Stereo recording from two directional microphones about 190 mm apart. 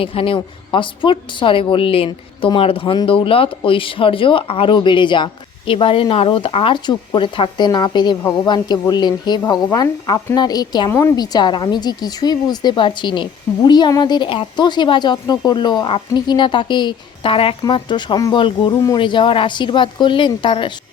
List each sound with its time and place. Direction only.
0.0 s a woman's voice: 30° left (ahead or behind)